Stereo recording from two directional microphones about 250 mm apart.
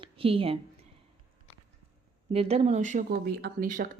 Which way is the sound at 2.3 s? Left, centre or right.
Right.